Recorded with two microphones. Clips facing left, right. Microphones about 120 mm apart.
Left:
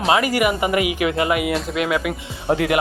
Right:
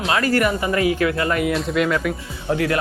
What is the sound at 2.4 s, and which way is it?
Speech, 20° left (ahead or behind).